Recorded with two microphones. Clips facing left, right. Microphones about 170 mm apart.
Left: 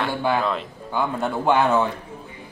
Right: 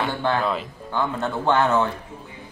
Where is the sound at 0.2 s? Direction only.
10° left (ahead or behind).